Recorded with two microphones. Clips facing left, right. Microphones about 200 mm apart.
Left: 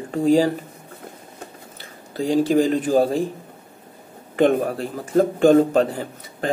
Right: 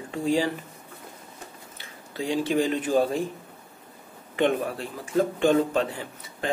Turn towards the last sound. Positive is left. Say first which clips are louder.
# left 6 dB
turn(degrees=40)  # may be behind; listen again after turning